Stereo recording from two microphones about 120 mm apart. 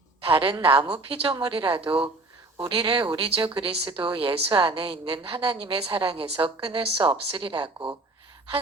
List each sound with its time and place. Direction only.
0.3 s speech: 45° right (ahead or behind)